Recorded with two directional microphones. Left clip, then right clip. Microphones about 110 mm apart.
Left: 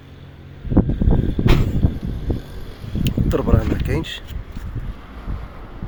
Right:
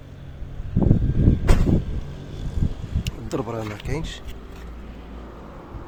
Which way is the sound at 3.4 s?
15° left (ahead or behind).